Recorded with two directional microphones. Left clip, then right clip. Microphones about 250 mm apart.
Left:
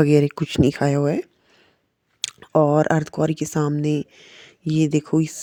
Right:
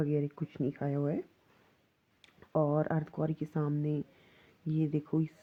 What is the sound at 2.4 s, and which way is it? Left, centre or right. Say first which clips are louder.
Speech: left 14 dB; left.